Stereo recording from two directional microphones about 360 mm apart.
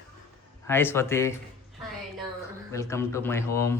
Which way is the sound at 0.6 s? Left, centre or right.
Centre.